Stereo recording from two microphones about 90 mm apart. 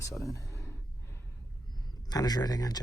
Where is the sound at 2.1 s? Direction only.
45° left (ahead or behind).